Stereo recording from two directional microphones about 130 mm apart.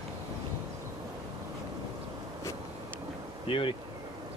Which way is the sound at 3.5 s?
45° left (ahead or behind).